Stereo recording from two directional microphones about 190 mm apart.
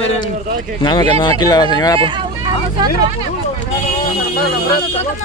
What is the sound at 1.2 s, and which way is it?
Speech, 20° left (ahead or behind).